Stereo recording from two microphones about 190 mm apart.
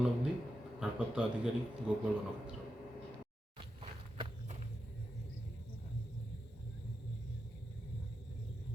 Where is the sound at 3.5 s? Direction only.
30° right (ahead or behind).